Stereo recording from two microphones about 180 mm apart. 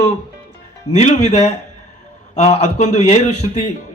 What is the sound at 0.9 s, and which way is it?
Speech, 40° left (ahead or behind).